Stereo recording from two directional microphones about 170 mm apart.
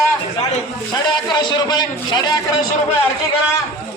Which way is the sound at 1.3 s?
25° left (ahead or behind).